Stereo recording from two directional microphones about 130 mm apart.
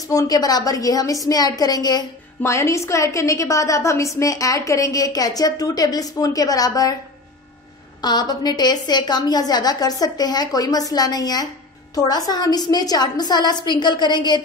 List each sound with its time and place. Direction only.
0.1 s a woman's voice: 25° left (ahead or behind)
8.0 s a woman's voice: 30° left (ahead or behind)